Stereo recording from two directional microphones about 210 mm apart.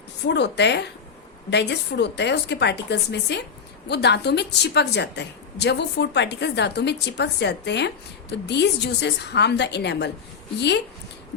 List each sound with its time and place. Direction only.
0.3 s a woman's voice: 55° left (ahead or behind)